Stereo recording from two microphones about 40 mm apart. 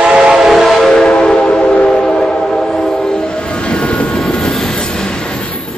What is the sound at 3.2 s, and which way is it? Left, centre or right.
Train, left.